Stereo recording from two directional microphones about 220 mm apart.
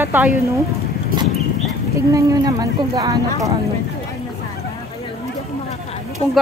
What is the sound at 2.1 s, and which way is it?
A woman's voice, 15° right (ahead or behind).